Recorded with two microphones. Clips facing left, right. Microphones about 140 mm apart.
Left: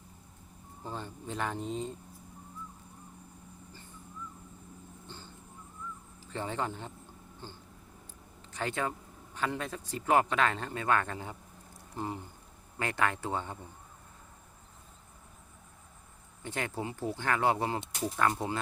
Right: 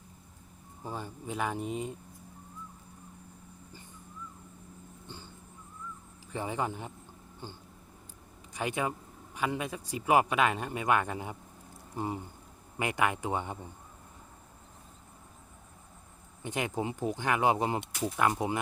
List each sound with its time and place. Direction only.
0.8 s speech: 10° right (ahead or behind)
5.0 s vehicle: 15° right (ahead or behind)
6.2 s speech: 10° right (ahead or behind)
16.4 s speech: 15° right (ahead or behind)